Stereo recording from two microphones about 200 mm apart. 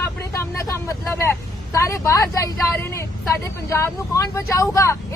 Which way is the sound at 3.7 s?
15° left (ahead or behind).